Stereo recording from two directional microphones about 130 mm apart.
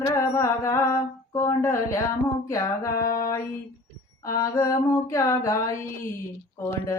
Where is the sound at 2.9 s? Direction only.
90° left.